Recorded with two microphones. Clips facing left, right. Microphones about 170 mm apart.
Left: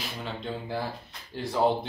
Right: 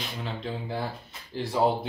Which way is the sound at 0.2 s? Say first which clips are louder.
Right 1 dB; centre (ahead or behind).